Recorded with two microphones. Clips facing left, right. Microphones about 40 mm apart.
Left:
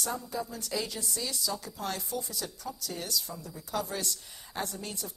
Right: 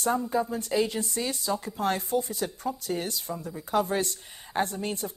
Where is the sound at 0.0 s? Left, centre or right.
Right.